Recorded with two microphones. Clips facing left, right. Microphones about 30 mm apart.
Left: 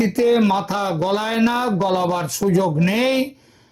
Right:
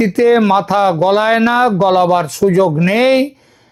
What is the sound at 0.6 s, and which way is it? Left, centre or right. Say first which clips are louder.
Speech: right 10 dB; right.